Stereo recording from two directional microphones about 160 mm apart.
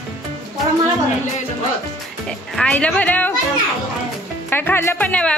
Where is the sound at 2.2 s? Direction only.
5° left (ahead or behind).